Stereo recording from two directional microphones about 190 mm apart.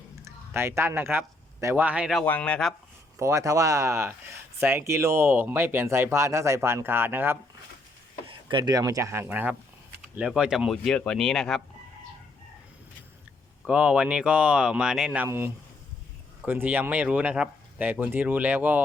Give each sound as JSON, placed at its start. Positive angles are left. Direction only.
{"t": 0.2, "sound": "speech", "side_deg": -15}
{"t": 2.2, "sound": "speech", "side_deg": 10}
{"t": 3.2, "sound": "speech", "side_deg": -15}
{"t": 8.3, "sound": "speech", "side_deg": -25}
{"t": 13.7, "sound": "speech", "side_deg": -5}